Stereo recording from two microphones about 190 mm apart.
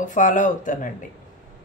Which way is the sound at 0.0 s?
45° left (ahead or behind).